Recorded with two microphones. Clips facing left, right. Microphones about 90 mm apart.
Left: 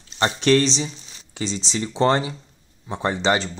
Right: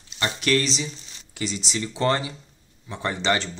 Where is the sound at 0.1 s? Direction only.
35° left (ahead or behind).